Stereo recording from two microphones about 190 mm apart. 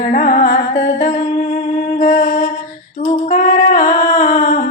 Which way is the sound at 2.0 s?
40° left (ahead or behind).